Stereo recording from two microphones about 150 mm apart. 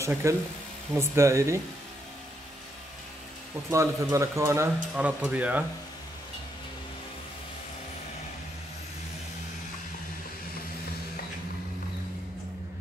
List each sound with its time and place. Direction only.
0.0 s speech: 20° right (ahead or behind)
3.7 s speech: 20° right (ahead or behind)
4.9 s speech: 10° right (ahead or behind)